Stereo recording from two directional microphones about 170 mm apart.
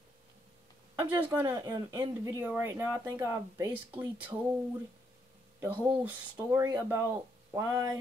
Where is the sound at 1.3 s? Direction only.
15° right (ahead or behind).